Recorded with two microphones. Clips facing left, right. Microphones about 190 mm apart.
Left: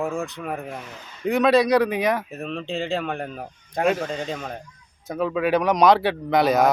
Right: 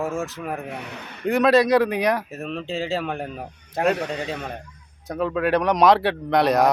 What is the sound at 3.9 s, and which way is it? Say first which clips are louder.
Speech: even; 65° right (ahead or behind).